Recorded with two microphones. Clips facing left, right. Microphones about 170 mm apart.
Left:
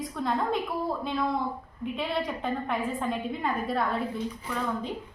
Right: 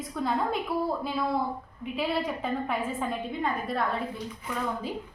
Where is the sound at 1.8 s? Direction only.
Centre (ahead or behind).